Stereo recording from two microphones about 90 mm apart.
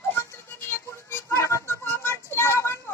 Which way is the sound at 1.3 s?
35° left (ahead or behind).